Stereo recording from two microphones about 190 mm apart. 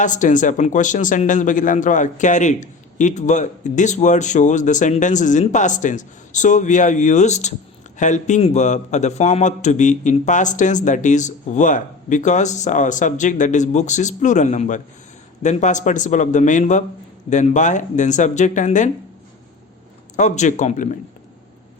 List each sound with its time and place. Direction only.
0.0 s speech: 40° left (ahead or behind)
20.1 s speech: 40° left (ahead or behind)